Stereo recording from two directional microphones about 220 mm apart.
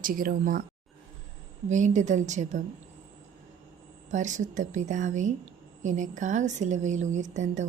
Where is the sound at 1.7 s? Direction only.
35° right (ahead or behind).